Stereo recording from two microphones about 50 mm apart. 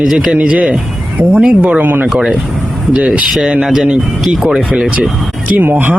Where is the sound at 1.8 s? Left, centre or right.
Right.